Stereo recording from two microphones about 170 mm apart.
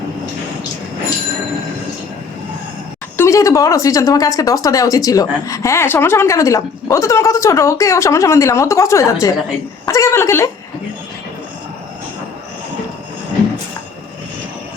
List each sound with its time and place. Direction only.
3.2 s speech: 15° left (ahead or behind)